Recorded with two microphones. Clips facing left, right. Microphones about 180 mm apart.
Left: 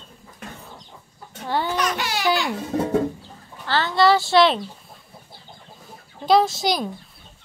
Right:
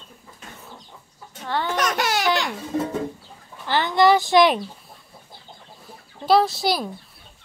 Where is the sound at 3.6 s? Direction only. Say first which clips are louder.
Right 1 dB; 15° right (ahead or behind).